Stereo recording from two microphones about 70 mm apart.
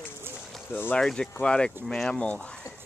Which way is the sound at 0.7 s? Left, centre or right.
Left.